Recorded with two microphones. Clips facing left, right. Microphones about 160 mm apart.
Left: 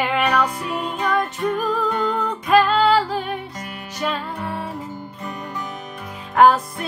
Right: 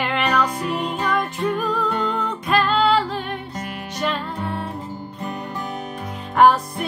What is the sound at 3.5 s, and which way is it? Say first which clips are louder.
Music: right 3 dB; 30° right (ahead or behind).